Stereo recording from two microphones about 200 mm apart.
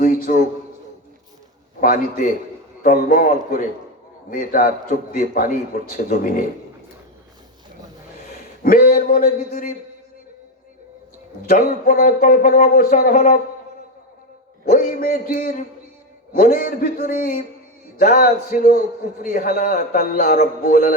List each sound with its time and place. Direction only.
0.2 s a man's voice: 50° left (ahead or behind)
1.8 s a man's voice: 45° left (ahead or behind)
8.6 s a man's voice: 45° left (ahead or behind)
11.4 s a man's voice: 45° left (ahead or behind)
14.6 s a man's voice: 45° left (ahead or behind)